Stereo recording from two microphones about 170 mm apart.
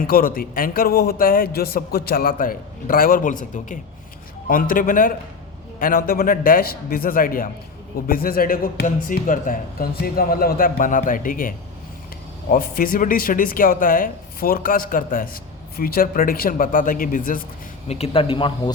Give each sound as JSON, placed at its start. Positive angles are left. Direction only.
{"t": 0.0, "sound": "speech", "side_deg": 55}
{"t": 17.8, "sound": "speech", "side_deg": 35}